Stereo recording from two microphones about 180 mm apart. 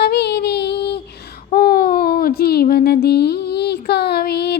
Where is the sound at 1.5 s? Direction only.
55° left (ahead or behind).